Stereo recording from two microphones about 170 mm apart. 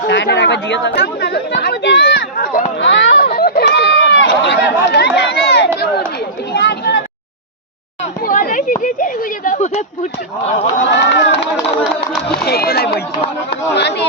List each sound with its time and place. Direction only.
0.1 s speech: 90° left
2.4 s a sound: 55° left (ahead or behind)
2.7 s a sound: 90° left
3.3 s run: 60° left (ahead or behind); by 5.9 s 80° left
6.5 s a sound: 80° left
8.2 s speech: 55° left (ahead or behind)
10.8 s speech: 85° left
12.5 s speech: 65° left (ahead or behind)
13.7 s speech: 80° left